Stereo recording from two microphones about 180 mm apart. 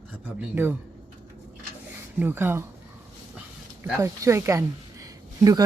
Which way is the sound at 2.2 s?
10° right (ahead or behind).